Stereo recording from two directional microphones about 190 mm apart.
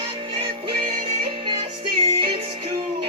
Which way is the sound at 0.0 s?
30° right (ahead or behind).